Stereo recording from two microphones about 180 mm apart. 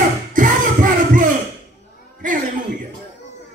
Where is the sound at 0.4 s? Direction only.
45° right (ahead or behind).